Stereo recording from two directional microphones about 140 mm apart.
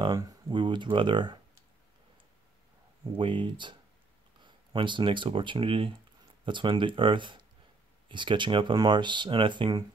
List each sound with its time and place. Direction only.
0.0 s speech: 35° right (ahead or behind)
3.0 s speech: 35° right (ahead or behind)